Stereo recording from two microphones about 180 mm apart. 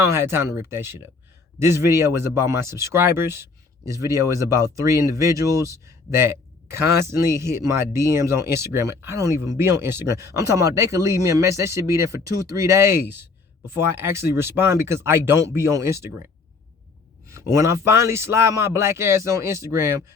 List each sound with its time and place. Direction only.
0.0 s speech: 15° right (ahead or behind)
17.2 s speech: 15° right (ahead or behind)